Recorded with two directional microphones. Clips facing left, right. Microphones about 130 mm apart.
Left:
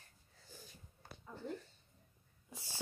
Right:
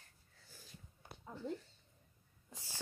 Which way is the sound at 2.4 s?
15° left (ahead or behind).